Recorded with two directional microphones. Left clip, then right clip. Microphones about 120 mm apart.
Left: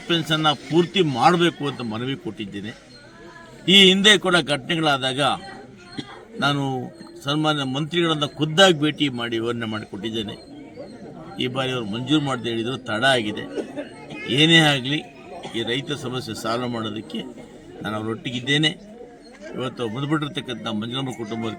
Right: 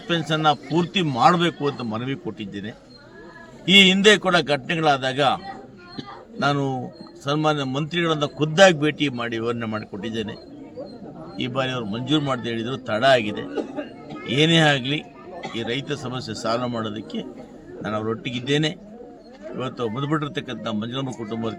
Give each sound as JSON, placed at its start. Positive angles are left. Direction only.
{"t": 0.3, "sound": "a man's voice", "side_deg": 0}
{"t": 6.4, "sound": "a man's voice", "side_deg": 0}
{"t": 11.3, "sound": "a man's voice", "side_deg": 5}